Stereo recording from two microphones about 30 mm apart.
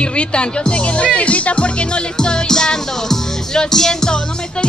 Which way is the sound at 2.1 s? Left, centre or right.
Left.